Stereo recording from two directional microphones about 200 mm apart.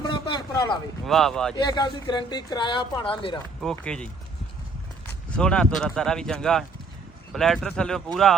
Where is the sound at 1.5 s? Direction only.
20° left (ahead or behind).